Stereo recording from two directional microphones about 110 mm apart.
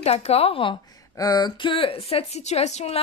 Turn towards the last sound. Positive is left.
turn(degrees=80)